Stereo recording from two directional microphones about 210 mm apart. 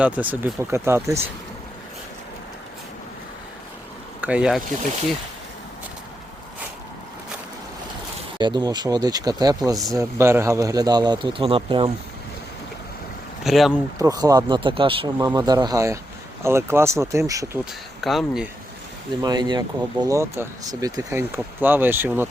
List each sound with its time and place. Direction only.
0.0 s speech: 5° right (ahead or behind)
4.2 s speech: 5° right (ahead or behind)
8.4 s speech: 20° right (ahead or behind)
13.4 s speech: centre (ahead or behind)
14.0 s speech: 15° right (ahead or behind)
18.0 s speech: centre (ahead or behind)
19.2 s speech: 20° right (ahead or behind)